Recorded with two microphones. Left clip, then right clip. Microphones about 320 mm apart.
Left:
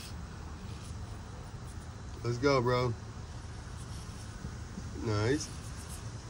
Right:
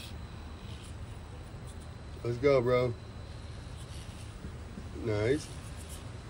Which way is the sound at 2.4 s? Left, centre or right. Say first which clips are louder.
Right 3 dB; centre.